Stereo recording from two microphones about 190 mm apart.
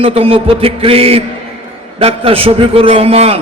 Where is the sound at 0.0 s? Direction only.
30° right (ahead or behind).